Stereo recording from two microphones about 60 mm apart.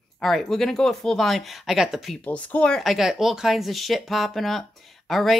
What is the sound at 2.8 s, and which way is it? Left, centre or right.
Speech, centre.